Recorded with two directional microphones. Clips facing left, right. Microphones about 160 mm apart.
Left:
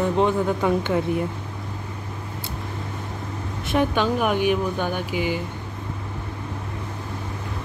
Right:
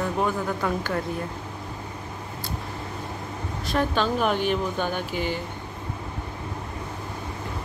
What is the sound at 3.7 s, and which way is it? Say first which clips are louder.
Speech: left 3 dB; 15° left (ahead or behind).